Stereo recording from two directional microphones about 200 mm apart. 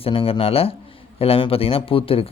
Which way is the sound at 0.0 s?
25° left (ahead or behind).